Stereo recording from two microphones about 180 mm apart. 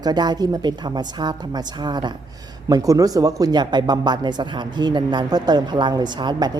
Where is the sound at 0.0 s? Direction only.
25° right (ahead or behind).